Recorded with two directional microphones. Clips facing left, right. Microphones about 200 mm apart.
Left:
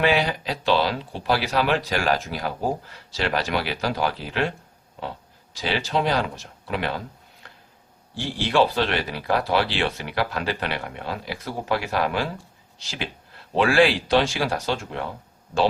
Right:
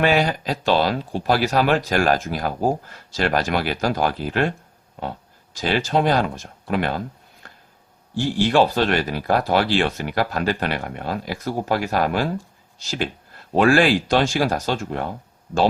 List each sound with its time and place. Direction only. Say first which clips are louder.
0.0 s speech: right 3 dB; 45° right (ahead or behind)
5.5 s speech: right 4 dB; 50° right (ahead or behind)
8.1 s speech: right 4 dB; 45° right (ahead or behind)